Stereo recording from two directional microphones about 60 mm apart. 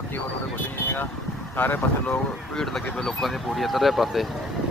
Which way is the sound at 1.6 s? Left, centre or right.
Left.